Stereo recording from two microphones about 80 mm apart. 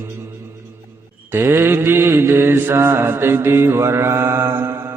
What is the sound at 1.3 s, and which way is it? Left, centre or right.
Mantra, right.